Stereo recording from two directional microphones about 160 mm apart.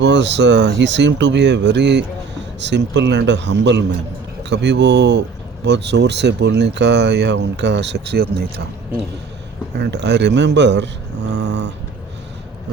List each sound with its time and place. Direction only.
0.0 s speech: 90° right
9.7 s speech: 90° right